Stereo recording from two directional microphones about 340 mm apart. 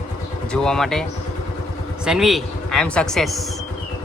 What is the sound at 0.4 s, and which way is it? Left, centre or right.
A man's voice, centre.